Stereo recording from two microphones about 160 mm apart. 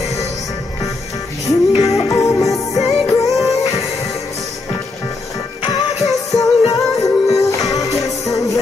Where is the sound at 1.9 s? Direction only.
20° left (ahead or behind).